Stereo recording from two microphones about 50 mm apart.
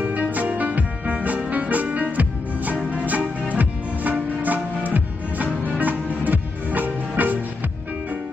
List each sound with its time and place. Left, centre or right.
0.0 s music: right
2.7 s music: left
3.5 s music: right